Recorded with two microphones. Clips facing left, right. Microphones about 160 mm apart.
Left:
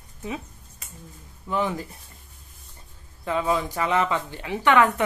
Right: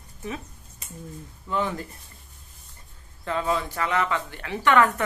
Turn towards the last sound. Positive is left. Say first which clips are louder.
# left 1 dB
turn(degrees=15)  # may be behind; listen again after turning